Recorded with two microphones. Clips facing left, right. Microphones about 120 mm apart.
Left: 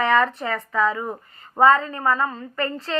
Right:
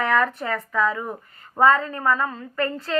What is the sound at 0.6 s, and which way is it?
Speech, 25° left (ahead or behind).